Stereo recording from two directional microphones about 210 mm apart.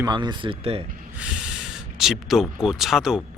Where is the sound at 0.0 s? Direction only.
20° right (ahead or behind).